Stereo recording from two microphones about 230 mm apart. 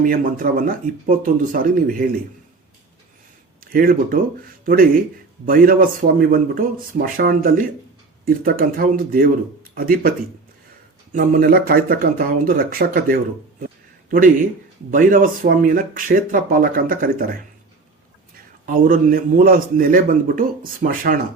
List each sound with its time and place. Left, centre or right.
0.0 s speech: right
3.6 s speech: right
11.1 s speech: right
14.8 s speech: right
18.6 s speech: right